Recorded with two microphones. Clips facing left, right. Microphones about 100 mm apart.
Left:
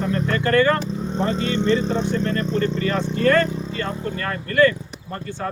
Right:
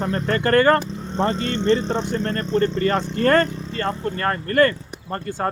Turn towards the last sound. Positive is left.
turn(degrees=-45)  # may be behind; listen again after turning